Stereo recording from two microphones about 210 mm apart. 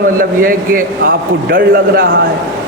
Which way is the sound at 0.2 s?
45° right (ahead or behind).